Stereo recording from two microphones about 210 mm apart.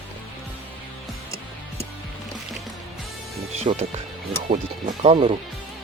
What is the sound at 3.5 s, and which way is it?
Speech, 30° right (ahead or behind).